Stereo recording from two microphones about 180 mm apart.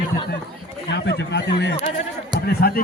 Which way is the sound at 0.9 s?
75° left (ahead or behind).